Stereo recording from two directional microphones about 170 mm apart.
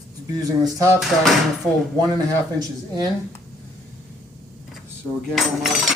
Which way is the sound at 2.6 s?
25° right (ahead or behind).